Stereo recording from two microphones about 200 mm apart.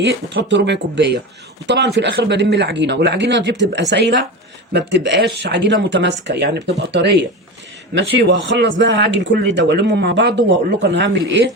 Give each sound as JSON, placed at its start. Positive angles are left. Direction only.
{"t": 0.0, "sound": "speech", "side_deg": -60}